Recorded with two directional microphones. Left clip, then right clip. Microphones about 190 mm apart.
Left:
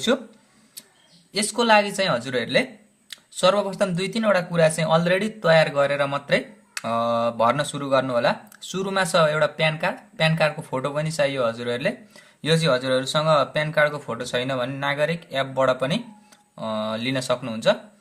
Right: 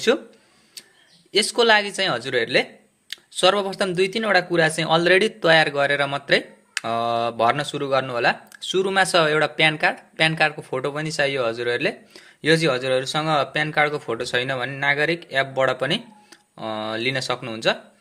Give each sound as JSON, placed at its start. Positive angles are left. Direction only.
{"t": 1.3, "sound": "speech", "side_deg": -25}